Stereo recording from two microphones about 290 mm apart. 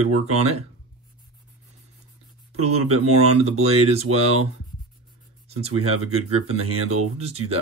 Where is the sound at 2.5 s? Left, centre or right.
Right.